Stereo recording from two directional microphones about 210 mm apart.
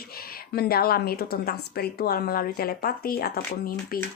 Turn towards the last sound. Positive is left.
turn(degrees=45)  # may be behind; listen again after turning